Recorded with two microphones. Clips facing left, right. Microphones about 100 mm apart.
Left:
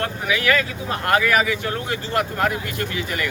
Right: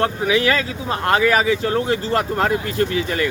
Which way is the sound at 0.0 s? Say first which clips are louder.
Right 5 dB; 30° right (ahead or behind).